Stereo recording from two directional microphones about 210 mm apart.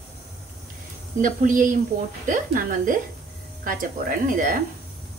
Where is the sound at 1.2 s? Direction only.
40° right (ahead or behind).